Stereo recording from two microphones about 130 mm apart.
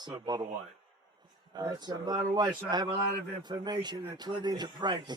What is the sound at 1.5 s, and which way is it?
A man's voice, 35° right (ahead or behind).